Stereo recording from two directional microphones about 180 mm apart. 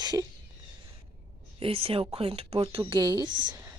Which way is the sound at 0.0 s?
25° right (ahead or behind).